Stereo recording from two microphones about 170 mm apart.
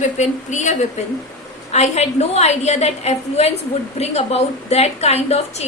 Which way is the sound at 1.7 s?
40° left (ahead or behind).